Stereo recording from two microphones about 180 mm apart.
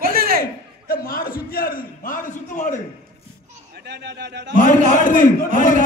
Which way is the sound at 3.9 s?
75° right (ahead or behind).